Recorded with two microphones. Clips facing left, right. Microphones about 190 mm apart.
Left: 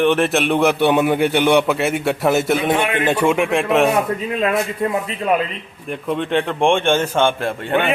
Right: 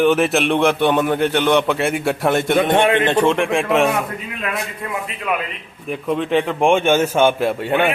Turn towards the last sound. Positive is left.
turn(degrees=-10)  # may be behind; listen again after turning